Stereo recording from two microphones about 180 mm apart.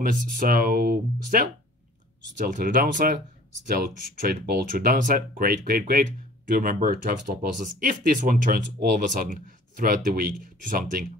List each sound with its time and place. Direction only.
0.0 s speech: 50° right (ahead or behind)